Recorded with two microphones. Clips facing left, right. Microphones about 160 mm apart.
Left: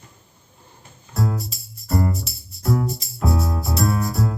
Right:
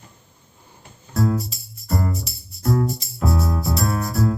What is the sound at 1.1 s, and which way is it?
Music, centre (ahead or behind).